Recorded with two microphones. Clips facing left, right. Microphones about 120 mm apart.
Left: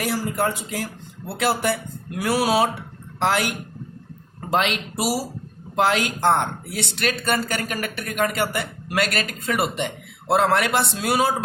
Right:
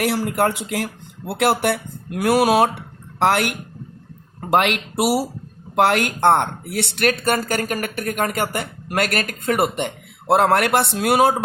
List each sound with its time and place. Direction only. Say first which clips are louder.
0.0 s speech: right 4 dB; 60° right (ahead or behind)
4.5 s speech: right 4 dB; 60° right (ahead or behind)